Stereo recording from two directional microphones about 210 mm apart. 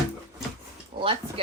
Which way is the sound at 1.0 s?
25° right (ahead or behind).